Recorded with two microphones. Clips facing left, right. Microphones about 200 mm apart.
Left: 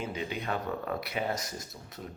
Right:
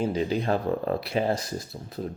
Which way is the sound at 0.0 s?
35° right (ahead or behind).